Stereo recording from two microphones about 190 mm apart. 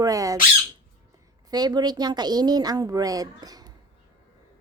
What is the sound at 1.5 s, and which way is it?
Speech, 20° right (ahead or behind).